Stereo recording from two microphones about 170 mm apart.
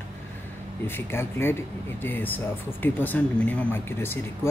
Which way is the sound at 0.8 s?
15° left (ahead or behind).